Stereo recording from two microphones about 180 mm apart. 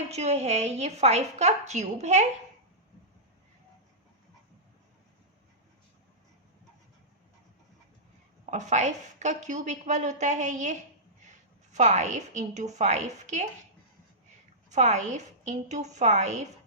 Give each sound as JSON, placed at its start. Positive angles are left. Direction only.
{"t": 0.1, "sound": "a woman's voice", "side_deg": -40}
{"t": 8.4, "sound": "a woman's voice", "side_deg": -40}
{"t": 14.7, "sound": "a woman's voice", "side_deg": -40}